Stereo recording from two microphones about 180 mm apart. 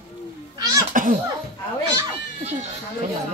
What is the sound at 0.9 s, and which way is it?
Cough, 50° right (ahead or behind).